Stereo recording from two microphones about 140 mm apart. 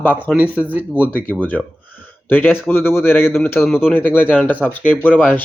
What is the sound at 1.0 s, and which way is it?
Speech, 10° left (ahead or behind).